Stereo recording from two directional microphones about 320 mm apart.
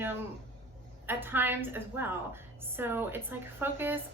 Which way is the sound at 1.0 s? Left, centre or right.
Centre.